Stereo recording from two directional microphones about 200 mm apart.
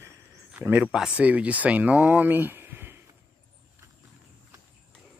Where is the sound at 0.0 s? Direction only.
10° right (ahead or behind).